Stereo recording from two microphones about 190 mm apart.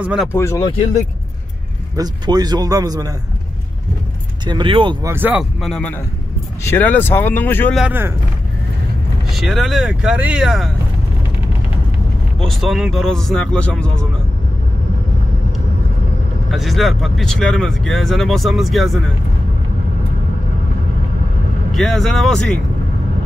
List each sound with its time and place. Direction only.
0.0 s speech: 5° right (ahead or behind)
0.3 s speech: 15° left (ahead or behind)
2.0 s speech: 20° right (ahead or behind)
4.5 s speech: 25° right (ahead or behind)
5.1 s speech: 10° right (ahead or behind); by 7.7 s 10° left (ahead or behind)
7.7 s speech: 5° right (ahead or behind)
9.3 s speech: centre (ahead or behind)
12.4 s speech: centre (ahead or behind)
16.4 s speech: centre (ahead or behind)
21.7 s speech: centre (ahead or behind)